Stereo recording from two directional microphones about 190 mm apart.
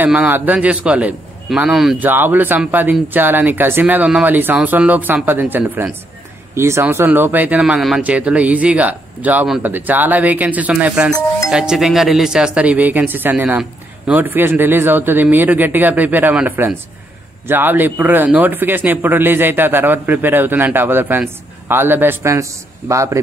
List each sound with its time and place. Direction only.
0.0 s a man's voice: 5° right (ahead or behind)
11.1 s speech: 15° left (ahead or behind)
11.5 s a man's voice: 5° right (ahead or behind)